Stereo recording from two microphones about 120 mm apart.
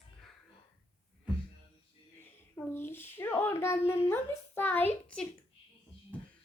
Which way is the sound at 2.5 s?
20° left (ahead or behind).